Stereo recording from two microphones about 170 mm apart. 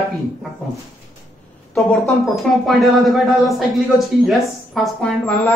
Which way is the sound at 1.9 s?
Centre (ahead or behind).